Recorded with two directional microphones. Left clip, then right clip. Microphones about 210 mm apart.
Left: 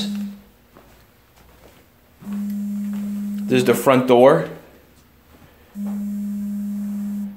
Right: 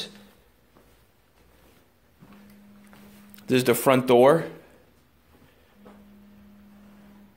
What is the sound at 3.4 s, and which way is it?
Speech, 45° right (ahead or behind).